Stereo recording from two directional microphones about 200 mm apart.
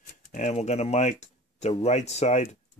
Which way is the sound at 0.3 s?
35° left (ahead or behind).